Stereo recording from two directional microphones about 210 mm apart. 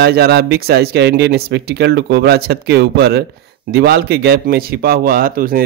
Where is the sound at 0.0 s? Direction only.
50° right (ahead or behind).